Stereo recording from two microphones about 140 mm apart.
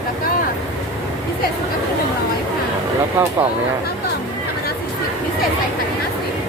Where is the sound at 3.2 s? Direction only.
15° right (ahead or behind).